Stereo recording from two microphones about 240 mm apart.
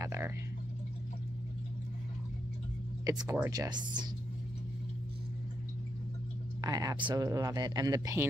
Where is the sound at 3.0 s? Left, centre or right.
Centre.